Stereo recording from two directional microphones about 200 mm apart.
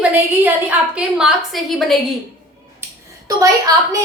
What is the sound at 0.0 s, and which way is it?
A woman's voice, 5° right (ahead or behind).